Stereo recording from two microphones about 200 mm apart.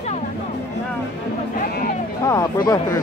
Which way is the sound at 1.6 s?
45° left (ahead or behind).